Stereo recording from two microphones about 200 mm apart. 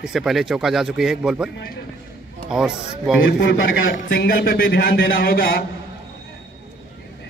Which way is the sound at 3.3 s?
55° left (ahead or behind).